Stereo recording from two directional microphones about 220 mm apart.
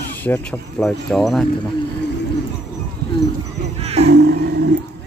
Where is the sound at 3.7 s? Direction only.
30° right (ahead or behind).